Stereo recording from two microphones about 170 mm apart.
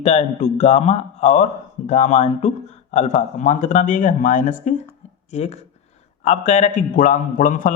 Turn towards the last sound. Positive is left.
turn(degrees=50)  # may be behind; listen again after turning